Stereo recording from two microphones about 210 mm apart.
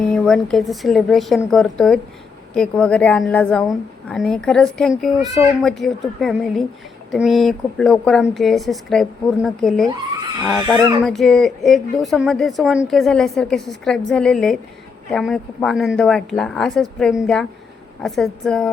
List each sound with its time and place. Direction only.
0.1 s a woman's voice: 5° left (ahead or behind)
10.6 s speech: 20° right (ahead or behind)
11.0 s a woman's voice: centre (ahead or behind)